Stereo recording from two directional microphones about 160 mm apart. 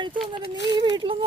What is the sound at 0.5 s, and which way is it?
Speech, 90° left.